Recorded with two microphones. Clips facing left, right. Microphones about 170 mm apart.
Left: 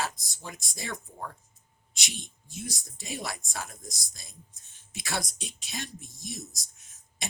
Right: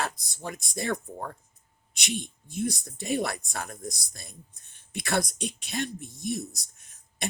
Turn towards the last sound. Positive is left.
turn(degrees=-60)  # may be behind; listen again after turning